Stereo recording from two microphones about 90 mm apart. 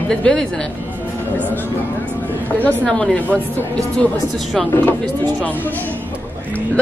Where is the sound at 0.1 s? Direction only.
10° left (ahead or behind).